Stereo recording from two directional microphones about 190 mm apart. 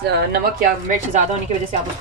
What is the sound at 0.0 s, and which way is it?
Speech, 55° right (ahead or behind).